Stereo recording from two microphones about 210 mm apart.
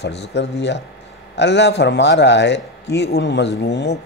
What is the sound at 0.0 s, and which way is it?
A man's voice, 55° left (ahead or behind).